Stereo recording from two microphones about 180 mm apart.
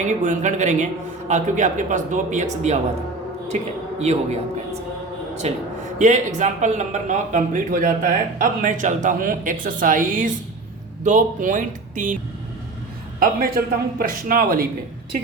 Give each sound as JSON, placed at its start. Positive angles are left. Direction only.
{"t": 0.0, "sound": "a man's voice", "side_deg": -45}
{"t": 13.1, "sound": "a man's voice", "side_deg": -55}